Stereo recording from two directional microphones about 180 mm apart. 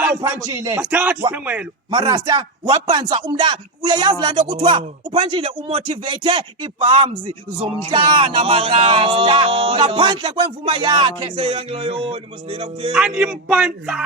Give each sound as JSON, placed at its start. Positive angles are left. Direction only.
{"t": 0.2, "sound": "speech", "side_deg": -15}
{"t": 1.9, "sound": "a man's voice", "side_deg": -20}
{"t": 12.9, "sound": "a man's voice", "side_deg": -5}